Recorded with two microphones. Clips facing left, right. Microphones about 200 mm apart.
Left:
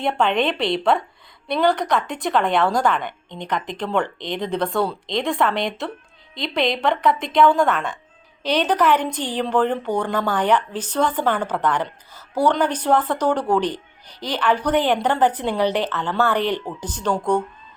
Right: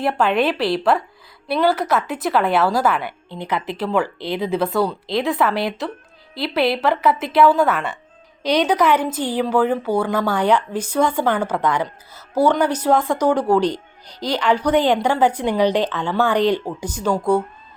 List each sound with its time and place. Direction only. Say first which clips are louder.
0.0 s a woman's voice: right 2 dB; 5° right (ahead or behind)